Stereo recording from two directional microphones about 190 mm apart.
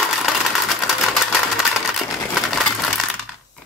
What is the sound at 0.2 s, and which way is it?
Sewing machine, centre (ahead or behind).